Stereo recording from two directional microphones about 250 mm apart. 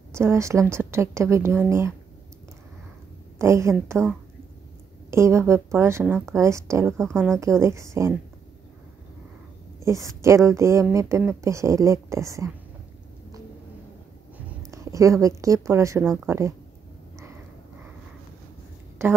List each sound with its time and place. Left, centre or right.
0.1 s speech: centre
3.3 s speech: centre
5.1 s speech: centre
7.0 s speech: centre
7.6 s speech: centre
9.8 s speech: centre
14.7 s a woman's voice: centre
19.0 s speech: centre